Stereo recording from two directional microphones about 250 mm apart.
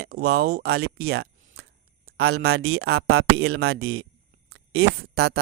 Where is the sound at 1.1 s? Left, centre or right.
Right.